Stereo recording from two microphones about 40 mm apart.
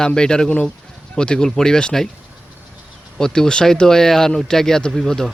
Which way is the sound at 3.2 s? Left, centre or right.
Centre.